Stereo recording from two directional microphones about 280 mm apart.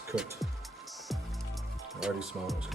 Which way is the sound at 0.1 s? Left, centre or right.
Centre.